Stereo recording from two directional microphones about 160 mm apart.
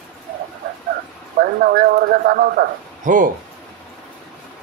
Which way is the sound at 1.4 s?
65° right (ahead or behind).